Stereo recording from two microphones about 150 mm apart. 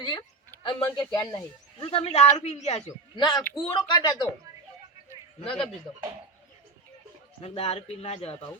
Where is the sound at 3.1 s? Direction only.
30° left (ahead or behind).